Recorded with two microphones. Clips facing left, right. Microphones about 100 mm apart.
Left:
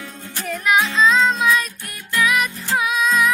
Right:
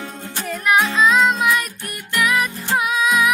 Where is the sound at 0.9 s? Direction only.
10° right (ahead or behind).